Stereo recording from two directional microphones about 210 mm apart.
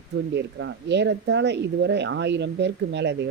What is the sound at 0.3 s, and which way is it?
Speech, 55° right (ahead or behind).